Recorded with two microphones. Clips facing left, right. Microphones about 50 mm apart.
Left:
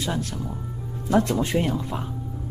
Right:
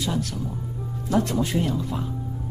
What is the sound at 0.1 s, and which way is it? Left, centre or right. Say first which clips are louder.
Speech: right 1 dB; left.